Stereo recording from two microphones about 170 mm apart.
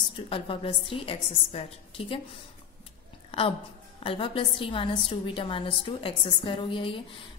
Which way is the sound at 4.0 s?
30° left (ahead or behind).